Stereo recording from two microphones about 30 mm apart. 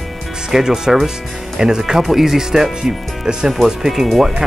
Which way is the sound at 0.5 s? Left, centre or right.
Centre.